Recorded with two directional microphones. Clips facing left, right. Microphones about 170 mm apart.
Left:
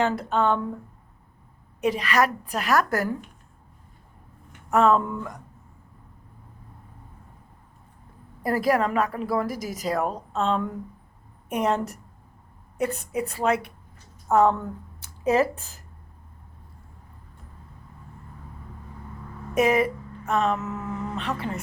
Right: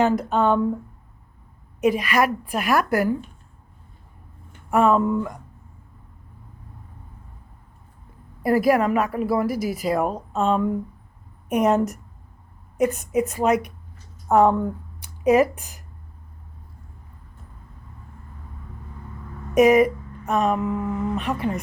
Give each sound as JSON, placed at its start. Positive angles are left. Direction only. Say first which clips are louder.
{"t": 0.0, "sound": "a woman's voice", "louder": "right 4 dB", "side_deg": -15}
{"t": 1.8, "sound": "a woman's voice", "louder": "right 3 dB", "side_deg": -15}
{"t": 4.7, "sound": "a woman's voice", "louder": "right 2 dB", "side_deg": -10}
{"t": 8.4, "sound": "a woman's voice", "louder": "right 4 dB", "side_deg": -10}
{"t": 13.1, "sound": "a woman's voice", "louder": "right 4 dB", "side_deg": -15}
{"t": 19.5, "sound": "a woman's voice", "louder": "right 6 dB", "side_deg": -15}